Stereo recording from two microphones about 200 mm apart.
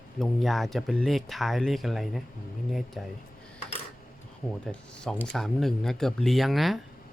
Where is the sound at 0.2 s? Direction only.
Centre (ahead or behind).